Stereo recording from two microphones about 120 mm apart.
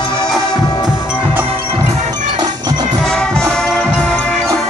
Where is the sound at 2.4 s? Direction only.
35° right (ahead or behind).